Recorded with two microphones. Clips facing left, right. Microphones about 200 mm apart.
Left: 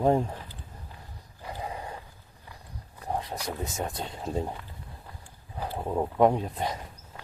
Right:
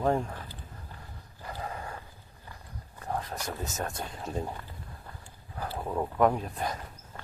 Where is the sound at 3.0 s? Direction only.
15° left (ahead or behind).